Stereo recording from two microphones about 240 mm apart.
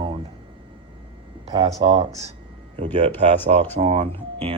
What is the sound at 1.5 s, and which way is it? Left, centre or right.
Speech, right.